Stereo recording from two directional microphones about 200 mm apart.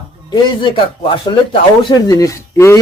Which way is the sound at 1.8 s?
20° left (ahead or behind).